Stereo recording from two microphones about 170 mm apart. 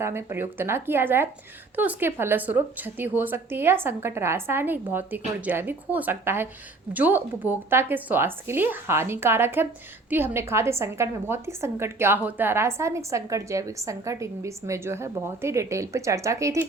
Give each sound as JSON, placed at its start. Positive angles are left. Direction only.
{"t": 0.0, "sound": "a woman's voice", "side_deg": -15}